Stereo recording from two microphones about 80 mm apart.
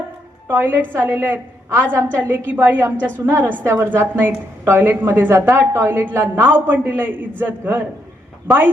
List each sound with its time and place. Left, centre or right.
0.4 s a woman's voice: right